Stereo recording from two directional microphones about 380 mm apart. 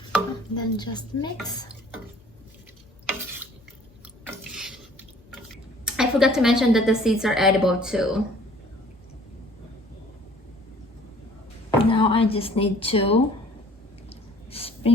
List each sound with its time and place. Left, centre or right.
0.1 s speech: centre
3.1 s a sound: centre
4.3 s water: centre
5.8 s a woman's voice: centre
11.8 s speech: centre
14.1 s a sound: centre